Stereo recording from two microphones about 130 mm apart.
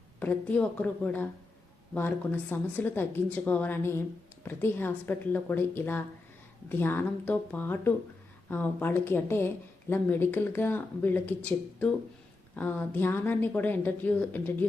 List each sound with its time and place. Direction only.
0.2 s speech: 15° left (ahead or behind)